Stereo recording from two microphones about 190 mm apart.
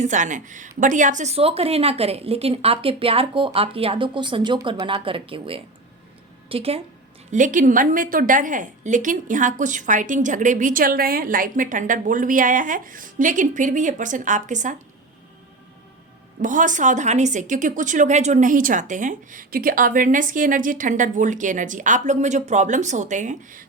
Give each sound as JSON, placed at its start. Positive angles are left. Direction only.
{"t": 0.0, "sound": "a woman's voice", "side_deg": -40}
{"t": 7.3, "sound": "a woman's voice", "side_deg": -40}
{"t": 16.4, "sound": "a woman's voice", "side_deg": -45}